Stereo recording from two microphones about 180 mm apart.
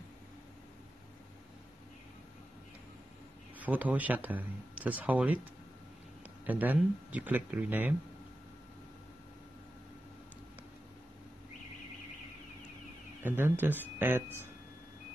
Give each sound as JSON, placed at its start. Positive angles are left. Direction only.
{"t": 3.5, "sound": "speech", "side_deg": -10}
{"t": 6.4, "sound": "speech", "side_deg": -10}
{"t": 13.2, "sound": "speech", "side_deg": -10}